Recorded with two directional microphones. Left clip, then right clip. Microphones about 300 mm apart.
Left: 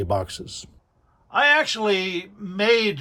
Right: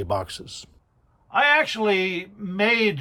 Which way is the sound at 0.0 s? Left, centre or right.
Centre.